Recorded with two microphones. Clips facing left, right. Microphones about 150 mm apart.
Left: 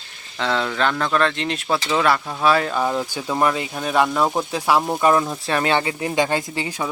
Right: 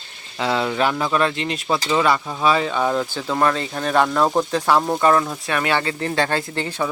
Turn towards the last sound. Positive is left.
turn(degrees=10)  # may be behind; listen again after turning